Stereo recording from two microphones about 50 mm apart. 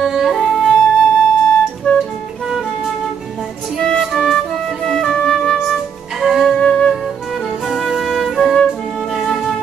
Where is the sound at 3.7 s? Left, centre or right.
Centre.